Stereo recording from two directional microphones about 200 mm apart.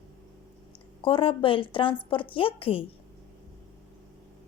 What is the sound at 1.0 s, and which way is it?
A woman's voice, 25° left (ahead or behind).